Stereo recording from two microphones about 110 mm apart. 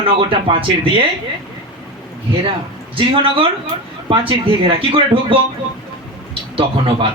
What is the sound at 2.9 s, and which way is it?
A man's voice, 55° right (ahead or behind).